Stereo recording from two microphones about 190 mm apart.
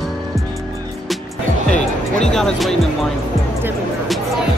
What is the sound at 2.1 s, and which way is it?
Speech, 5° left (ahead or behind).